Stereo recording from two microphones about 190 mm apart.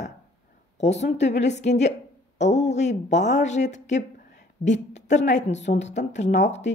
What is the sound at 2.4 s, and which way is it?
A woman's voice, 35° left (ahead or behind).